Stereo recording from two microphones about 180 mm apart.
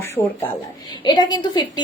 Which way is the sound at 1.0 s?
25° left (ahead or behind).